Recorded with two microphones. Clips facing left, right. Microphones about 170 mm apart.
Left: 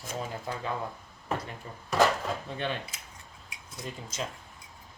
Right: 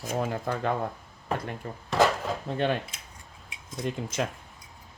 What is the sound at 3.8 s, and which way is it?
Speech, 60° right (ahead or behind).